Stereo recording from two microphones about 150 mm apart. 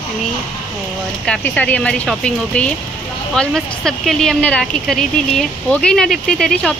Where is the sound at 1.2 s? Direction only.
5° left (ahead or behind).